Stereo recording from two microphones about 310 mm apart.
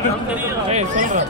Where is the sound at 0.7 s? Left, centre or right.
Right.